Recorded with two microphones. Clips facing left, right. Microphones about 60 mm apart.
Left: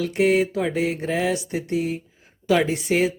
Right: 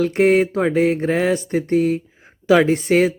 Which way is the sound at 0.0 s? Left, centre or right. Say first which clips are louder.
Right 4 dB; right.